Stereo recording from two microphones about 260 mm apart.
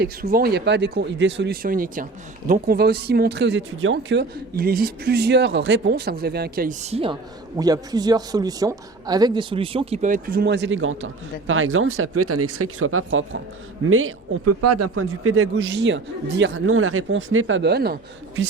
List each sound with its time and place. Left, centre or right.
0.0 s a man's voice: right